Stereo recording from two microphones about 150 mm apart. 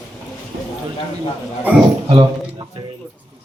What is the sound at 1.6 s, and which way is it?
Speech, 10° right (ahead or behind).